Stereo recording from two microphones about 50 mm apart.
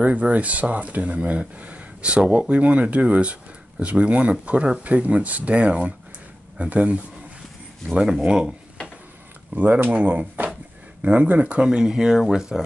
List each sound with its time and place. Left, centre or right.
0.0 s speech: right
8.0 s speech: centre
9.5 s speech: right
11.6 s speech: centre